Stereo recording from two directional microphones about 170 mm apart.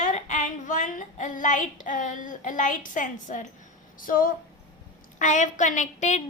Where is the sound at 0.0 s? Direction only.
45° left (ahead or behind).